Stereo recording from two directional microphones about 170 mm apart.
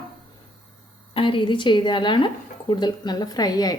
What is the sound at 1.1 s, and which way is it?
A woman's voice, 30° left (ahead or behind).